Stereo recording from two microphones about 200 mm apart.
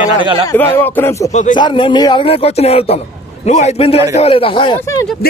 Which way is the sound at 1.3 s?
35° left (ahead or behind).